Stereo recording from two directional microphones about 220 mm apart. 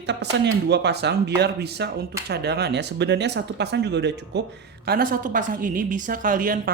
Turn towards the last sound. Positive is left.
turn(degrees=-40)  # may be behind; listen again after turning